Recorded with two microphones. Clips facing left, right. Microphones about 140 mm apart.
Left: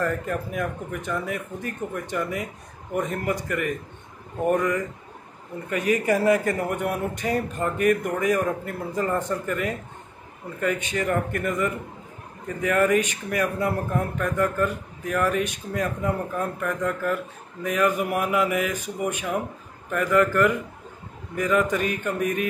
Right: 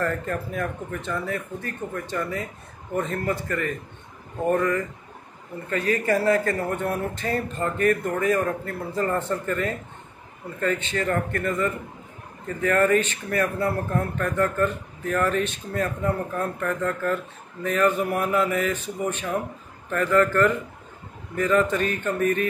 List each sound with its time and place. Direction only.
0.0 s speech: 10° left (ahead or behind)